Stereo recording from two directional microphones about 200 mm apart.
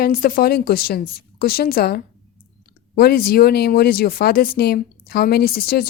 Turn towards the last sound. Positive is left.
turn(degrees=50)  # may be behind; listen again after turning